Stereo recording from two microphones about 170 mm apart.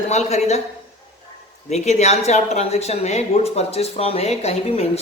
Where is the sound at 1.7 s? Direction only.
40° left (ahead or behind).